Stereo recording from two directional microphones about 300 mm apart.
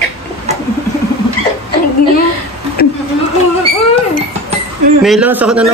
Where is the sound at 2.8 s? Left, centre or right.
Left.